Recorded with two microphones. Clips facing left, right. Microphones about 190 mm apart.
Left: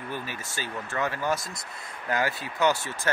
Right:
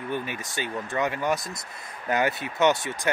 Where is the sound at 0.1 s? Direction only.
20° right (ahead or behind).